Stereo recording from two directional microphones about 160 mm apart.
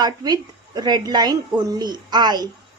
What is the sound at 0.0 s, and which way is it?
A woman's voice, 25° right (ahead or behind).